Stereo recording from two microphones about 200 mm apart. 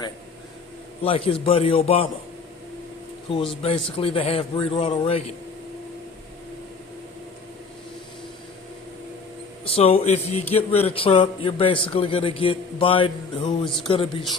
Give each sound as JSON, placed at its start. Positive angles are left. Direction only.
{"t": 1.0, "sound": "speech", "side_deg": 30}
{"t": 3.2, "sound": "speech", "side_deg": 25}
{"t": 9.6, "sound": "speech", "side_deg": 30}